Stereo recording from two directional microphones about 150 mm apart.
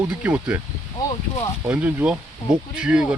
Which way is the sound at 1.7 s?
10° right (ahead or behind).